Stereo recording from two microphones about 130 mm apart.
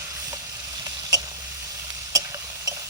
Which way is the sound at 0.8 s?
30° right (ahead or behind).